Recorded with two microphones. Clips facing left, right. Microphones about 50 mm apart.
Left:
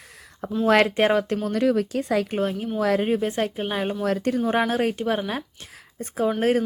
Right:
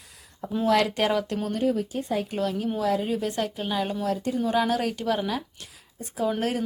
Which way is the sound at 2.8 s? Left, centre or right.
Left.